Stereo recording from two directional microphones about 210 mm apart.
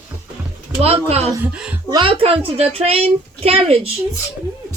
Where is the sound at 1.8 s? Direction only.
20° right (ahead or behind).